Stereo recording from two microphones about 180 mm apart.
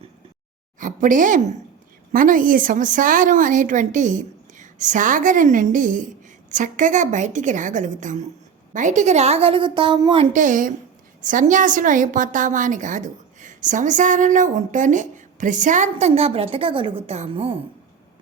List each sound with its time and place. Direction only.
0.8 s a woman's voice: 45° right (ahead or behind); by 10.2 s 25° right (ahead or behind)
10.3 s a woman's voice: 45° right (ahead or behind)